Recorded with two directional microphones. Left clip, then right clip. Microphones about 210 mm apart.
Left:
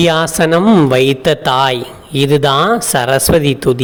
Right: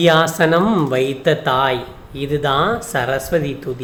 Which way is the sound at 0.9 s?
45° left (ahead or behind).